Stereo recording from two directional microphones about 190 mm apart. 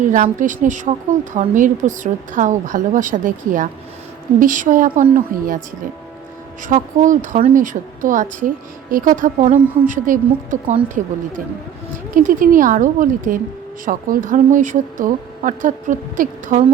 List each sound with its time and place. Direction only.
0.0 s a woman's voice: 45° right (ahead or behind)
6.7 s a woman's voice: 40° right (ahead or behind)
12.1 s a woman's voice: 45° right (ahead or behind)